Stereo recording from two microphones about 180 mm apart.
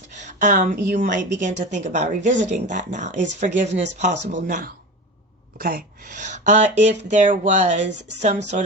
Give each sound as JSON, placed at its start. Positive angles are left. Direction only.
{"t": 0.1, "sound": "a woman's voice", "side_deg": -40}
{"t": 7.8, "sound": "speech", "side_deg": -75}